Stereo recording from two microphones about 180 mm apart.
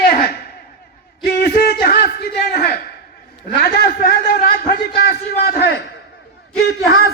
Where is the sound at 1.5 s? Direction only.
60° left (ahead or behind).